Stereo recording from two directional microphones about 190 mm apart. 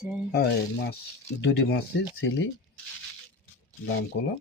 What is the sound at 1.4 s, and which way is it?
Speech, 65° left (ahead or behind).